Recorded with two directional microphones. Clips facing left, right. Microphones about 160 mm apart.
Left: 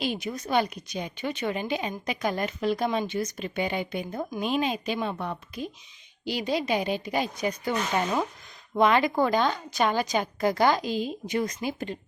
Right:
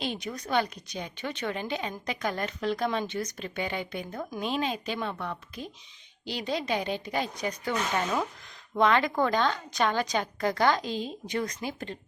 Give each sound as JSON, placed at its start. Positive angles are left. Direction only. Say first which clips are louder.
{"t": 0.0, "sound": "a woman's voice", "louder": "left 3 dB", "side_deg": 10}